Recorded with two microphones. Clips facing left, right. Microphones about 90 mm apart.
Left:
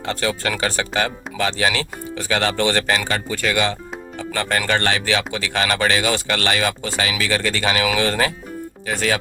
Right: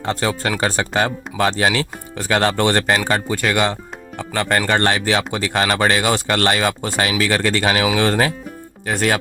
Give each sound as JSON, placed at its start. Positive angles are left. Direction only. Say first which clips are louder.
{"t": 0.0, "sound": "speech", "louder": "right 2 dB", "side_deg": -35}
{"t": 4.6, "sound": "speech", "louder": "right 3 dB", "side_deg": -35}
{"t": 8.9, "sound": "speech", "louder": "right 3 dB", "side_deg": -50}